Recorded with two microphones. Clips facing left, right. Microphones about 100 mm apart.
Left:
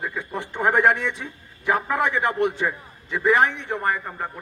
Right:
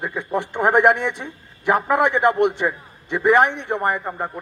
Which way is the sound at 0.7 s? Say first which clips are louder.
Right 3 dB; 20° right (ahead or behind).